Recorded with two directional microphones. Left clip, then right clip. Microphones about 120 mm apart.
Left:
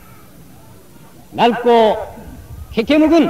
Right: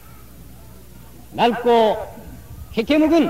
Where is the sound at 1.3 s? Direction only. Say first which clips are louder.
Left 4 dB; 35° right (ahead or behind).